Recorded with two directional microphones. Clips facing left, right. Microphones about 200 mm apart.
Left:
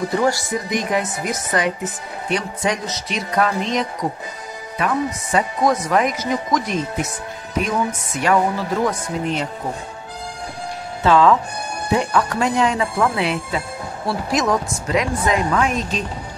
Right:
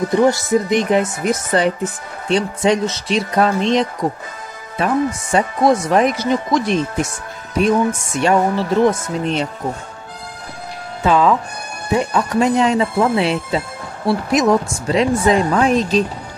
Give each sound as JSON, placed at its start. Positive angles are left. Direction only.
{"t": 0.1, "sound": "speech", "side_deg": -20}
{"t": 8.2, "sound": "speech", "side_deg": -25}
{"t": 11.1, "sound": "speech", "side_deg": -15}